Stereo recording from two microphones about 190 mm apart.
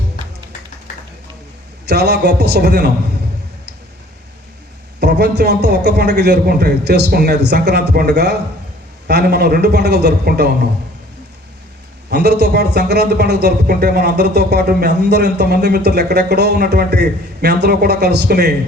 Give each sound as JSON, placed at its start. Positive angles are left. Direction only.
{"t": 1.9, "sound": "speech", "side_deg": -60}
{"t": 4.9, "sound": "speech", "side_deg": -60}
{"t": 12.1, "sound": "speech", "side_deg": -60}